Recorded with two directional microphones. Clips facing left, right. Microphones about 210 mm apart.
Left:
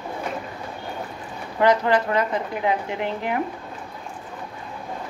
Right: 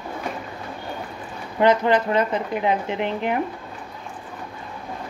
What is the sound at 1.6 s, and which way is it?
Speech, 20° right (ahead or behind).